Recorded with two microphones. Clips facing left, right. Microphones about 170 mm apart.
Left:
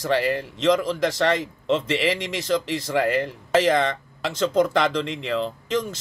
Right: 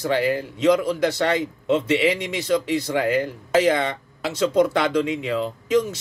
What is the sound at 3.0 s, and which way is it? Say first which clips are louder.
Speech: right 1 dB; centre (ahead or behind).